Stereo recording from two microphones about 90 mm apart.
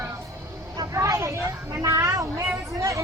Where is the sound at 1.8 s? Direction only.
35° right (ahead or behind).